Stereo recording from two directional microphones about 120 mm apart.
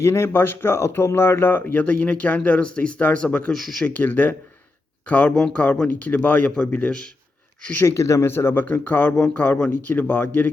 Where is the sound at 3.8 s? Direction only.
15° left (ahead or behind).